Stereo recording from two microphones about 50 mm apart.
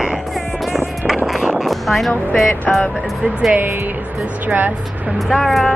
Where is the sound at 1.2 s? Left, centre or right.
Centre.